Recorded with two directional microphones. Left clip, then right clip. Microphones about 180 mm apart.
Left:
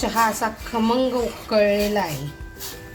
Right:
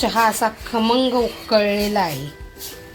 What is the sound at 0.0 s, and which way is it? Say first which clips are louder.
Speech: right 3 dB; 25° right (ahead or behind).